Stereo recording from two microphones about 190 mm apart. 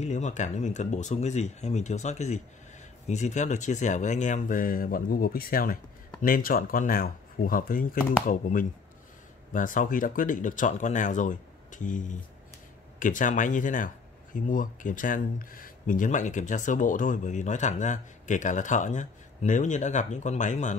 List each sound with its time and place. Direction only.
0.0 s speech: 40° left (ahead or behind)